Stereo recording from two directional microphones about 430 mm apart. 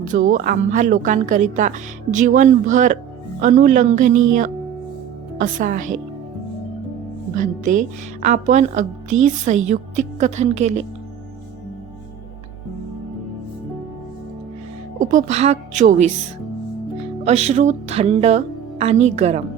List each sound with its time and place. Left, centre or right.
0.1 s speech: centre
7.3 s speech: centre
14.9 s speech: centre
17.2 s speech: centre